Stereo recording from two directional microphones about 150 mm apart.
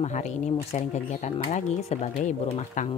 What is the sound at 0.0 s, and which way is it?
Speech, 50° left (ahead or behind).